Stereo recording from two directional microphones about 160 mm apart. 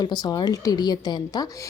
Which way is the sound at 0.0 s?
25° left (ahead or behind).